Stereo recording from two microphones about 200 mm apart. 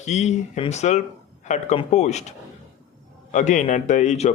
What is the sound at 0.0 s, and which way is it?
Speech, 35° left (ahead or behind).